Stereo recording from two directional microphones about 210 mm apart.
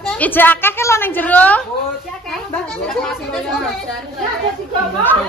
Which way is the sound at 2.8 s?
Centre (ahead or behind).